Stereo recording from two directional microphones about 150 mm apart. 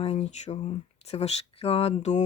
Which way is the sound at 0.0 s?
45° left (ahead or behind).